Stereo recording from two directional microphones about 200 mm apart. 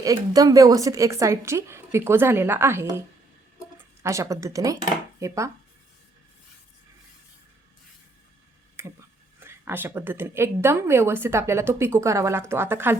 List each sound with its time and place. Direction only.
0.0 s a woman's voice: 15° right (ahead or behind)
4.0 s a woman's voice: 15° right (ahead or behind)
8.7 s speech: 10° right (ahead or behind)